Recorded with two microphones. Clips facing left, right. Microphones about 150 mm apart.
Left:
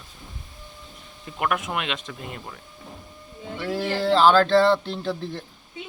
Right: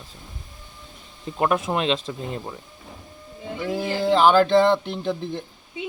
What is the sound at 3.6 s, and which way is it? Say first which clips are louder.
A man's voice: right 1 dB; 15° right (ahead or behind).